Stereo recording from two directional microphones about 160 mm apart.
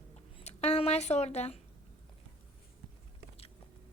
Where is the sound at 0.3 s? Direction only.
40° left (ahead or behind).